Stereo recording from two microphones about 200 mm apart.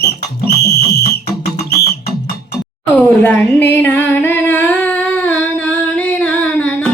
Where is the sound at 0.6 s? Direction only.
55° left (ahead or behind).